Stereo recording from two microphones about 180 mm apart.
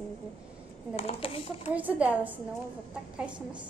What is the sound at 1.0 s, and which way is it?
Speech, 35° left (ahead or behind).